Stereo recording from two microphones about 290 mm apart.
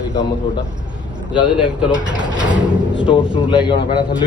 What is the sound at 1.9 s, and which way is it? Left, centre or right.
Speech, centre.